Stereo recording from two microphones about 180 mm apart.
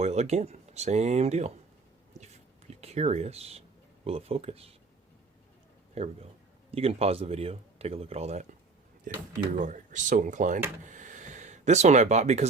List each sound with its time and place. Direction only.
0.0 s speech: 35° right (ahead or behind)
2.2 s whispering: 40° right (ahead or behind)
4.0 s speech: 35° right (ahead or behind)
5.9 s speech: 35° right (ahead or behind)
9.1 s speech: 50° right (ahead or behind)
10.8 s a sound: 45° right (ahead or behind)